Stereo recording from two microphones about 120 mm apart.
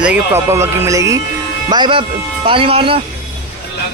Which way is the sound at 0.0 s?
15° right (ahead or behind).